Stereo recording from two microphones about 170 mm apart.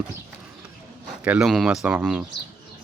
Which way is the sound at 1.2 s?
5° right (ahead or behind).